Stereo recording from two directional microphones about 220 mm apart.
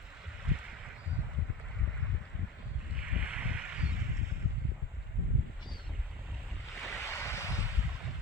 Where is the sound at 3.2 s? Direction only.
5° right (ahead or behind).